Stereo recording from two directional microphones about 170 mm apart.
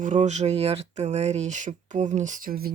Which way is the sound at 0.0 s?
45° right (ahead or behind).